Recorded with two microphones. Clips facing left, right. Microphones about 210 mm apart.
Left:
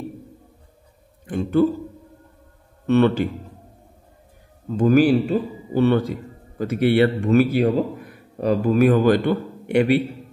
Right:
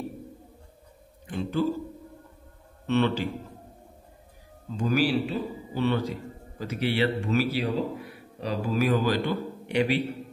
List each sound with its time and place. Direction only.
1.2 s a man's voice: 50° left (ahead or behind)
2.9 s speech: 55° left (ahead or behind)
4.6 s a man's voice: 50° left (ahead or behind)